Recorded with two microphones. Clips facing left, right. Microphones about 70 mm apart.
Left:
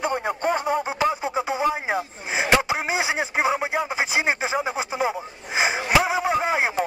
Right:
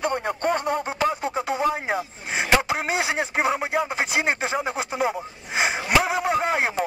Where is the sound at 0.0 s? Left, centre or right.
Centre.